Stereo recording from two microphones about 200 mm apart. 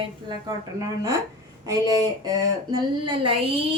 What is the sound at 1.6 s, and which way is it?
Speech, 15° right (ahead or behind).